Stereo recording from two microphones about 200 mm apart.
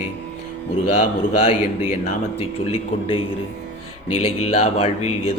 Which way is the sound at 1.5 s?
30° left (ahead or behind).